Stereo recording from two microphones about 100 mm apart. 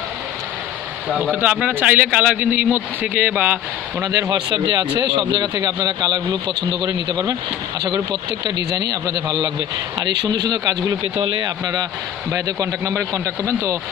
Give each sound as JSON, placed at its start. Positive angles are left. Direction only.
{"t": 1.3, "sound": "speech", "side_deg": -15}
{"t": 4.0, "sound": "a man's voice", "side_deg": -35}
{"t": 5.1, "sound": "a man's voice", "side_deg": -50}